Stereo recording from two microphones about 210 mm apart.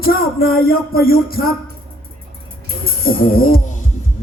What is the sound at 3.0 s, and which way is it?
Music, 45° left (ahead or behind).